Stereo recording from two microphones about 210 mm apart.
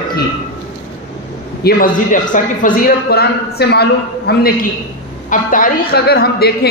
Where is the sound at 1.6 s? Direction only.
40° left (ahead or behind).